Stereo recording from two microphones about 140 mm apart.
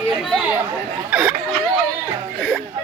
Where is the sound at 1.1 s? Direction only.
10° right (ahead or behind).